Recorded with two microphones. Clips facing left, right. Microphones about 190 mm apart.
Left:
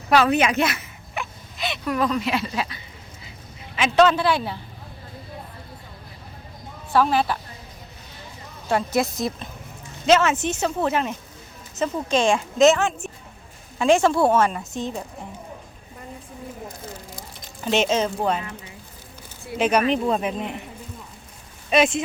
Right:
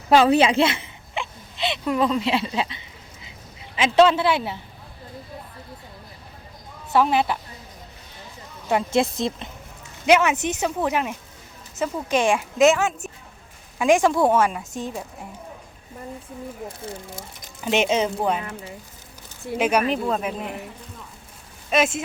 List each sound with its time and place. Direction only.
0.1 s a woman's voice: 25° right (ahead or behind)
6.9 s speech: 20° right (ahead or behind)
8.7 s speech: 25° right (ahead or behind)
10.1 s a woman's voice: 15° right (ahead or behind)
17.2 s speech: 15° right (ahead or behind)
19.5 s a woman's voice: 10° right (ahead or behind)
21.7 s speech: 5° right (ahead or behind)